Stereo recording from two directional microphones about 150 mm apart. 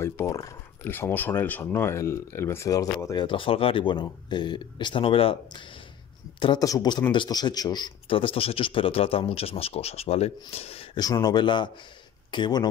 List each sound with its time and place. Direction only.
0.0 s speech: 20° left (ahead or behind)
3.3 s a man's voice: 35° left (ahead or behind)
11.0 s speech: 25° left (ahead or behind)